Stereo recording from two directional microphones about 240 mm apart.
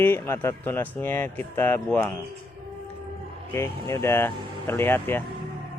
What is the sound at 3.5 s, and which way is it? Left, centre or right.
Speech, centre.